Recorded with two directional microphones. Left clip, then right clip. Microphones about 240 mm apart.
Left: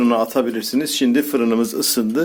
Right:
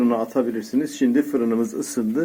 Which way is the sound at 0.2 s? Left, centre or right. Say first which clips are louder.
Left 4 dB; left.